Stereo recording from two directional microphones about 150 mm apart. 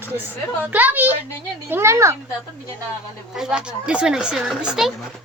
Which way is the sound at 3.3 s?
5° right (ahead or behind).